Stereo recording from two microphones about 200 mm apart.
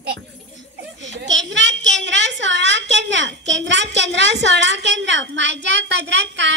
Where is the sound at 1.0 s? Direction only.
65° right (ahead or behind).